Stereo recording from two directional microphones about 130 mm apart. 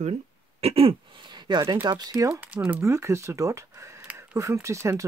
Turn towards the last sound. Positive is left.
turn(degrees=-20)  # may be behind; listen again after turning